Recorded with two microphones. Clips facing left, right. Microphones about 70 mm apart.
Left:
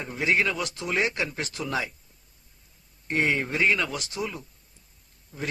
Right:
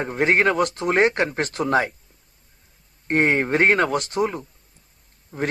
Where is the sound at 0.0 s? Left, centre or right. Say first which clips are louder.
Right 6 dB; right.